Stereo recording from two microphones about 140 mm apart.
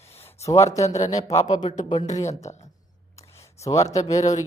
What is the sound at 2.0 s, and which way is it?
Speech, 25° left (ahead or behind).